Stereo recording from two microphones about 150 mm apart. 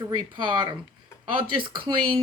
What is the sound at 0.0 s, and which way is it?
Speech, 30° right (ahead or behind).